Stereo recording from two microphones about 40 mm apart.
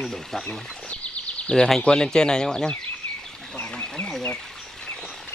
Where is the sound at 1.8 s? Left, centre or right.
Centre.